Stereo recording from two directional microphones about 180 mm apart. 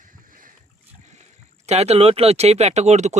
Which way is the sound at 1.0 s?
40° right (ahead or behind).